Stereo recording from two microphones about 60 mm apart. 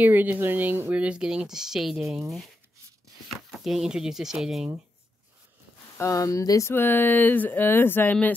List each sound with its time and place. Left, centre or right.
0.0 s speech: right
0.9 s speech: centre
3.3 s chopping: centre
5.9 s speech: left
6.7 s speech: left